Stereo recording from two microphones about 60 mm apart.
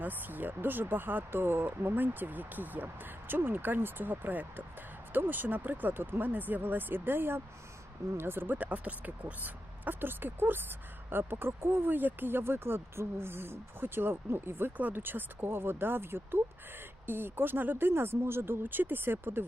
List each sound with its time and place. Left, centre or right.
0.0 s speech: right